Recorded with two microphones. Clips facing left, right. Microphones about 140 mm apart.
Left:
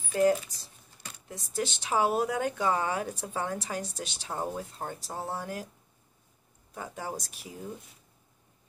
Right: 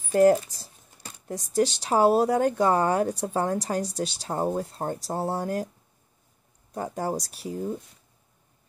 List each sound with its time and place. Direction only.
0.0 s speech: 45° right (ahead or behind)
6.7 s speech: 40° right (ahead or behind)